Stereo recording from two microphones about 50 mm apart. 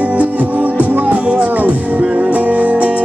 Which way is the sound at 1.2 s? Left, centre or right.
Centre.